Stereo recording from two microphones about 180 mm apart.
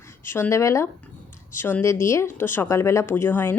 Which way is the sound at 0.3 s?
15° left (ahead or behind).